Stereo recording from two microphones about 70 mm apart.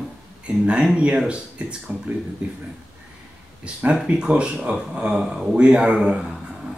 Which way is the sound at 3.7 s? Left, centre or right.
Centre.